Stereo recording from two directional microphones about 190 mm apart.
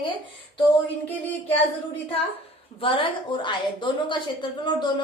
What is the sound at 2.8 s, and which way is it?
A woman's voice, 25° left (ahead or behind).